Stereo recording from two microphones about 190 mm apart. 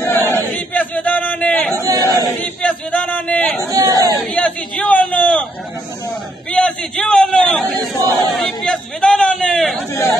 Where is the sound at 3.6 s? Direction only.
15° right (ahead or behind).